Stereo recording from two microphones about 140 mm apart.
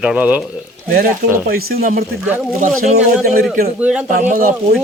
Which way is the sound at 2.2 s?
10° right (ahead or behind).